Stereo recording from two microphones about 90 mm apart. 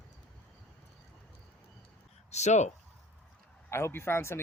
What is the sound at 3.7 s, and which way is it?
Speech, 25° left (ahead or behind).